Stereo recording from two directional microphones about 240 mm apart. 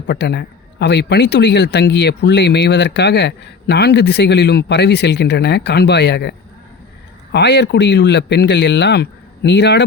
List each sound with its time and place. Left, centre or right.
0.1 s a man's voice: left
7.3 s a man's voice: left